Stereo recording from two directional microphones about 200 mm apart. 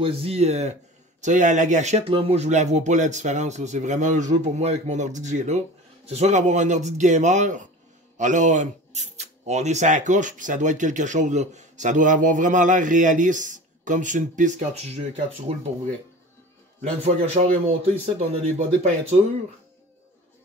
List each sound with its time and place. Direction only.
0.0 s speech: 30° right (ahead or behind)
17.0 s speech: 30° right (ahead or behind)